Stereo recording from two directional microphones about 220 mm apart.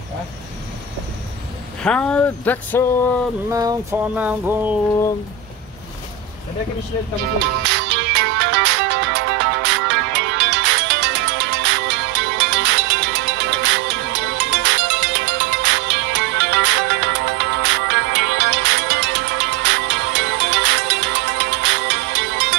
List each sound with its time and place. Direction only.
1.8 s speech: 5° left (ahead or behind)
3.4 s music: 15° right (ahead or behind)
7.6 s music: 50° right (ahead or behind)